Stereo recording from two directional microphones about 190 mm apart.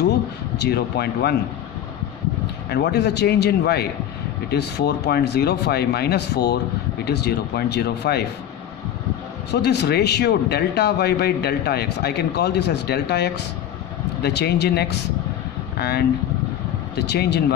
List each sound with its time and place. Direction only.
0.6 s speech: 55° left (ahead or behind)
2.7 s speech: 60° left (ahead or behind)
9.5 s speech: 60° left (ahead or behind)